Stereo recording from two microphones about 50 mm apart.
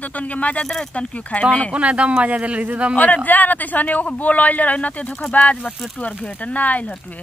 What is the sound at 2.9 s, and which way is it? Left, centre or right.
Speech, left.